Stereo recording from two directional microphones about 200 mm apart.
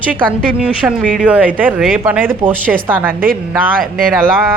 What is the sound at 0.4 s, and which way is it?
A woman's voice, 5° right (ahead or behind).